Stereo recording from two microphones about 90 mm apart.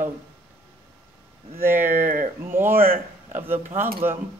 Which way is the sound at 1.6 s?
25° right (ahead or behind).